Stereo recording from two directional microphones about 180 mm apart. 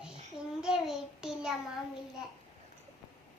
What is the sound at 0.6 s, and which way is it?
Child singing, 5° right (ahead or behind).